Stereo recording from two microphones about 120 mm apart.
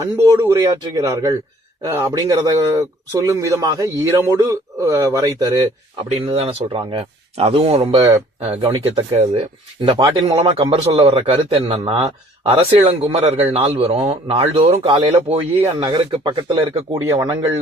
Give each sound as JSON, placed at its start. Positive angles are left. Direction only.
{"t": 0.0, "sound": "speech", "side_deg": -25}
{"t": 6.2, "sound": "speech", "side_deg": -55}
{"t": 15.3, "sound": "speech", "side_deg": -60}
{"t": 15.7, "sound": "speech", "side_deg": -40}
{"t": 16.9, "sound": "speech", "side_deg": -25}